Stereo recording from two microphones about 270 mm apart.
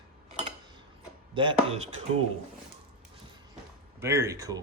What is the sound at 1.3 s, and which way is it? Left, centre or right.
Chopping, centre.